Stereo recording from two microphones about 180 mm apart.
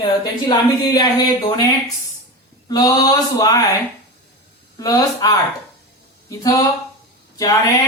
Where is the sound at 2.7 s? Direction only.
20° left (ahead or behind).